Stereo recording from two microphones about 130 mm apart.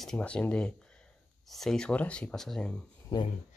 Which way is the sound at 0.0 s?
5° left (ahead or behind).